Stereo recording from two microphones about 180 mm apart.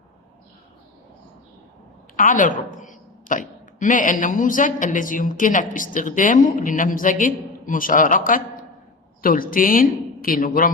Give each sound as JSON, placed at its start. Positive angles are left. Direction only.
{"t": 2.1, "sound": "a woman's voice", "side_deg": 45}